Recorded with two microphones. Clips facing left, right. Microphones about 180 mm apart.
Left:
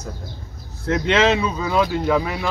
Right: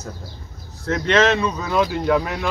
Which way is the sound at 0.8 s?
15° left (ahead or behind).